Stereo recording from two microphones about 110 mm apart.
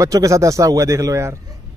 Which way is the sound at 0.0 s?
30° right (ahead or behind).